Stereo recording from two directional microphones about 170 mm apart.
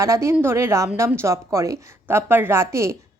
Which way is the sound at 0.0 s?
15° right (ahead or behind).